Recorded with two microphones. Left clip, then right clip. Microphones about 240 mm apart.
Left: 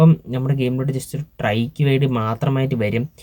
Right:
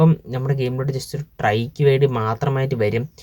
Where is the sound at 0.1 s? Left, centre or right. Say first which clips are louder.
Left 1 dB; centre.